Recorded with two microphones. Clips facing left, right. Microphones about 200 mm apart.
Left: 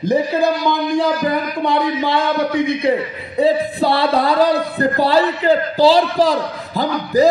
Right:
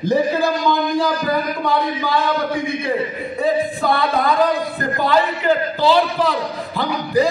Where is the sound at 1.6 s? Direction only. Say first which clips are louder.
Left 6 dB; 25° left (ahead or behind).